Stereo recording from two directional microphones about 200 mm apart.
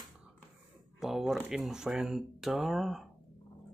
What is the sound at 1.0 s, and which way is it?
Speech, centre (ahead or behind).